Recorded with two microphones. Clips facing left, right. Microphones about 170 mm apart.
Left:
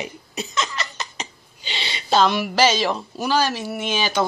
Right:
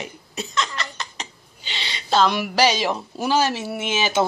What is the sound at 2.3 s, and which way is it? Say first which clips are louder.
Speech: left 1 dB; 15° right (ahead or behind).